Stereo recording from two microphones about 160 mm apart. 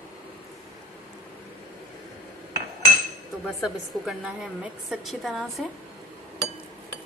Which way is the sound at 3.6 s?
5° right (ahead or behind).